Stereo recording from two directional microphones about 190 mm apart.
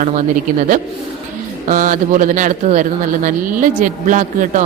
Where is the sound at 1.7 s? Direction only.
45° right (ahead or behind).